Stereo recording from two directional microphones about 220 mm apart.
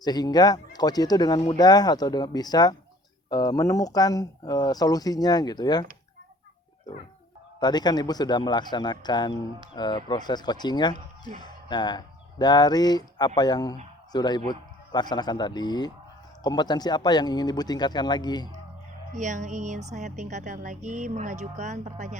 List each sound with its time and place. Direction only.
0.0 s speech: 20° left (ahead or behind)
7.6 s speech: 20° left (ahead or behind)
19.1 s speech: 35° right (ahead or behind)